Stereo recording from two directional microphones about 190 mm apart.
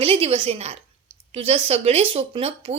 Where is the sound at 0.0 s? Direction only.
30° right (ahead or behind).